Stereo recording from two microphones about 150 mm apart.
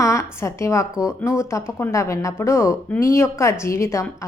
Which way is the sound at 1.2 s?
20° left (ahead or behind).